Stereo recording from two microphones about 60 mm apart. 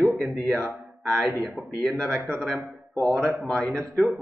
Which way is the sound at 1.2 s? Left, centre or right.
Centre.